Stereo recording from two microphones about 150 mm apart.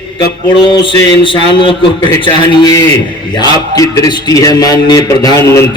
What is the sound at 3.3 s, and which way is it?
A man's voice, 25° left (ahead or behind).